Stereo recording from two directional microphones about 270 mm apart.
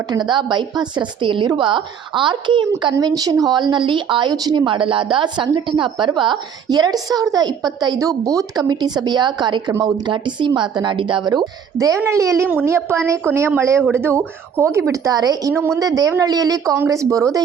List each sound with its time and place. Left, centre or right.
0.1 s a woman's voice: centre